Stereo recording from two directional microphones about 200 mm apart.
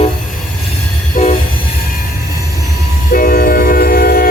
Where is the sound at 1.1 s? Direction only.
35° left (ahead or behind).